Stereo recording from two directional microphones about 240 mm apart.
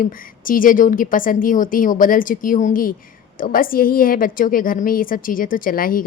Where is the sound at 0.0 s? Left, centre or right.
Left.